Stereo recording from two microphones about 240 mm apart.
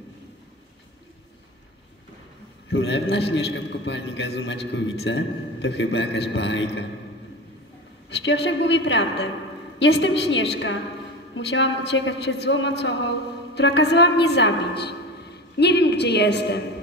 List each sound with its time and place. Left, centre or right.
2.7 s a man's voice: left
8.1 s a man's voice: left